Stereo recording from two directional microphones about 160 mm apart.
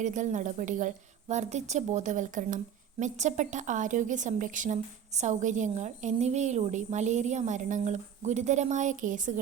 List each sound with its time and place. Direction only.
0.0 s a woman's voice: 50° right (ahead or behind)